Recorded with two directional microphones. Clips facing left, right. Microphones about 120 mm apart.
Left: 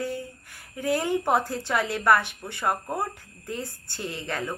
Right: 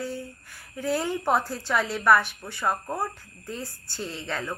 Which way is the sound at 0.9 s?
15° left (ahead or behind).